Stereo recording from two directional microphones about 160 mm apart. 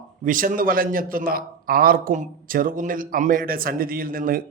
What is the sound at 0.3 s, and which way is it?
A man's voice, 60° right (ahead or behind).